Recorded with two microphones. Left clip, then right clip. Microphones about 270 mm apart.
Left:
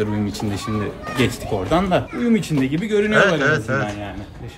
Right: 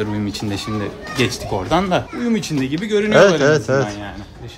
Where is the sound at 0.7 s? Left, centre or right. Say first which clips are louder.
Right 1 dB; centre.